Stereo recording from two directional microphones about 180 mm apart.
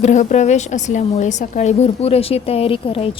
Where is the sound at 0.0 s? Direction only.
40° left (ahead or behind).